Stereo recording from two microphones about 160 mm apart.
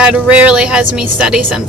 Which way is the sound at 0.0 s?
5° right (ahead or behind).